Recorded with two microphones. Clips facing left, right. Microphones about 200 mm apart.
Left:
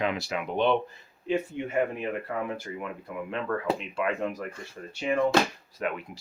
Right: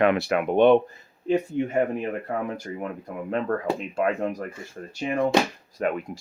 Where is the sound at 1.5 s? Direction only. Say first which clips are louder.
Right 8 dB; 40° right (ahead or behind).